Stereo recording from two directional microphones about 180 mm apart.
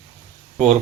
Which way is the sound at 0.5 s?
40° right (ahead or behind).